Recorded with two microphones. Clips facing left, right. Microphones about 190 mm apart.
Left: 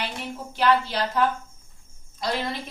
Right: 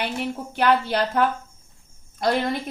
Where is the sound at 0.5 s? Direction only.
60° right (ahead or behind).